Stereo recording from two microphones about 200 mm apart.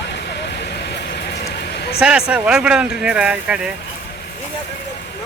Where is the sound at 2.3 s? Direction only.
5° right (ahead or behind).